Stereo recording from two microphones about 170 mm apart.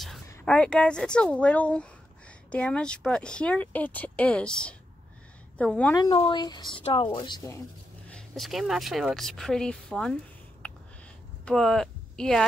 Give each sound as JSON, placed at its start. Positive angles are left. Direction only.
{"t": 0.5, "sound": "a woman's voice", "side_deg": 5}
{"t": 5.9, "sound": "speech", "side_deg": 25}
{"t": 8.1, "sound": "speech", "side_deg": 0}
{"t": 11.4, "sound": "speech", "side_deg": 0}